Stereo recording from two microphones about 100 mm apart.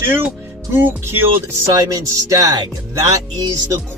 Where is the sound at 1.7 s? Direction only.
35° right (ahead or behind).